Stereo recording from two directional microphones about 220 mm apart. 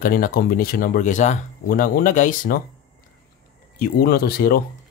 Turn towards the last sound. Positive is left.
turn(degrees=45)  # may be behind; listen again after turning